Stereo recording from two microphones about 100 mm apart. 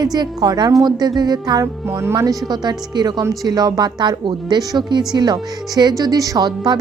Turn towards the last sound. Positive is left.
turn(degrees=-45)  # may be behind; listen again after turning